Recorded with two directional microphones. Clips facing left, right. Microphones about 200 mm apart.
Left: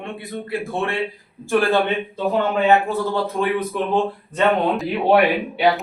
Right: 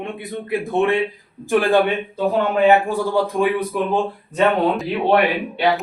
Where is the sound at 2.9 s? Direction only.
15° right (ahead or behind).